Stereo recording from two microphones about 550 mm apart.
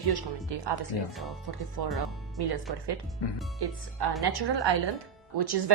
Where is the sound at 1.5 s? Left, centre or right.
Right.